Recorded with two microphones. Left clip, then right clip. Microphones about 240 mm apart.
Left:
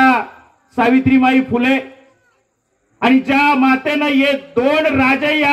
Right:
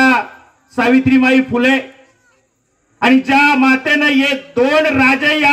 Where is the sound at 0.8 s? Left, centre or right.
Left.